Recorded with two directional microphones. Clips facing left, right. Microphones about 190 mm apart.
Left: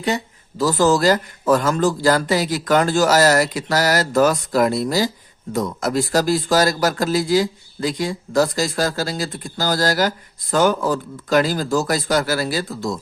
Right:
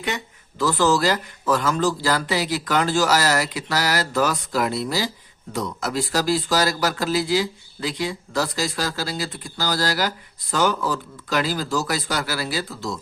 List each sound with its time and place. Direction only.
0.6 s speech: 40° left (ahead or behind)